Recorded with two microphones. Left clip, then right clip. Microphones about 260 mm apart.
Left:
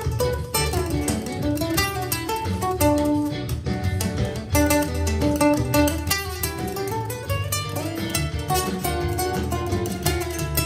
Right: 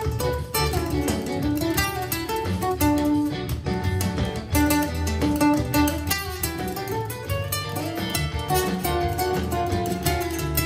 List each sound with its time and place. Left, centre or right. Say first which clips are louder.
1.5 s music: left 2 dB; left
4.6 s music: left 2 dB; left
8.1 s music: even; left